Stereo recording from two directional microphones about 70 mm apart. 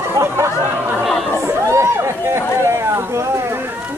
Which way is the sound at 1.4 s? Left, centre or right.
Right.